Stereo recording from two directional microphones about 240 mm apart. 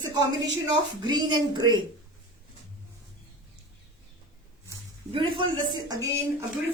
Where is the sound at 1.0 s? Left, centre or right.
Centre.